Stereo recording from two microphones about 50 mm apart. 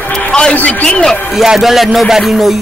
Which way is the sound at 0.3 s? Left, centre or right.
Centre.